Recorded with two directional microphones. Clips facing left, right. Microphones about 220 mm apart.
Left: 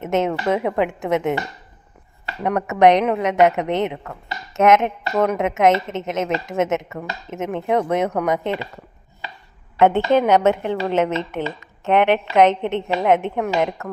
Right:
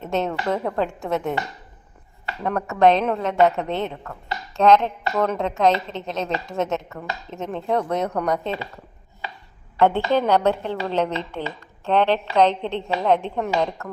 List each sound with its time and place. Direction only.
0.0 s a woman's voice: 20° left (ahead or behind)
9.7 s a woman's voice: 20° left (ahead or behind)